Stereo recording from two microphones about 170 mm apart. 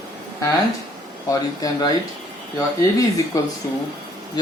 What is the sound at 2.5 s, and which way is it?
Speech, 20° left (ahead or behind).